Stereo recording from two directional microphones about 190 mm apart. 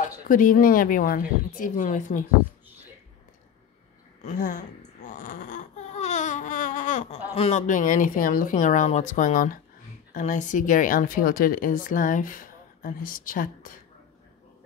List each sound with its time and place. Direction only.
0.3 s a woman's voice: 45° left (ahead or behind)
4.2 s a woman's voice: 45° left (ahead or behind)